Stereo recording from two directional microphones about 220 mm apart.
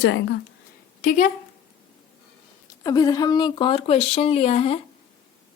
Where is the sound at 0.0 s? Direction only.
55° left (ahead or behind).